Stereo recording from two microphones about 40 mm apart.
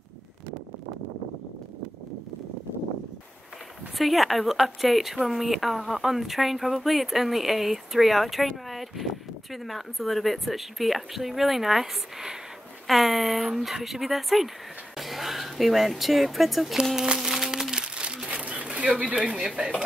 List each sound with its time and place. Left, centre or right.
4.0 s speech: centre
17.2 s crumpling: centre; by 18.2 s right
18.3 s a sound: right
18.7 s bird: right
19.1 s speech: centre